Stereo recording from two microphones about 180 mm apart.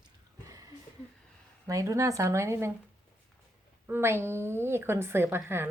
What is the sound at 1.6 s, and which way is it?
A woman's voice, 20° right (ahead or behind).